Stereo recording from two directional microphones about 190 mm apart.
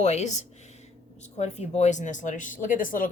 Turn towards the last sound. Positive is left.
turn(degrees=45)  # may be behind; listen again after turning